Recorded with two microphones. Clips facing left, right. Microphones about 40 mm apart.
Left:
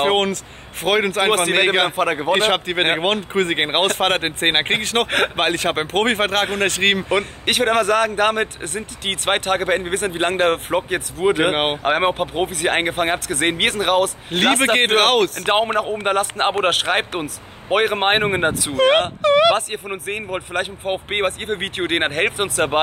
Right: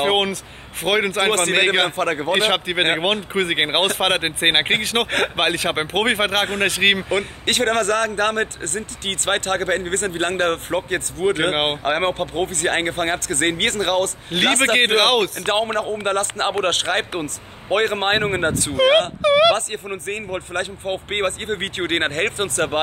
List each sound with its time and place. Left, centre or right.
0.0 s speech: centre
2.3 s speech: centre
7.1 s a man's voice: centre
11.8 s a man's voice: centre
14.3 s speech: centre
15.5 s a man's voice: centre